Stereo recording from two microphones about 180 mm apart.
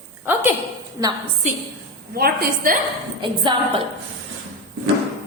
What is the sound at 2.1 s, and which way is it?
Speech, 55° right (ahead or behind).